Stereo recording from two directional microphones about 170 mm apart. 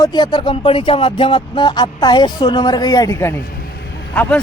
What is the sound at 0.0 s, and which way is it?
Speech, 25° left (ahead or behind).